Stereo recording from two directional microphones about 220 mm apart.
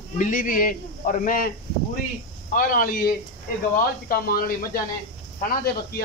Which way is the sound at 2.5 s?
40° left (ahead or behind).